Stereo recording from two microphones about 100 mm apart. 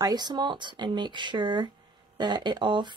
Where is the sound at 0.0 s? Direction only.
45° right (ahead or behind).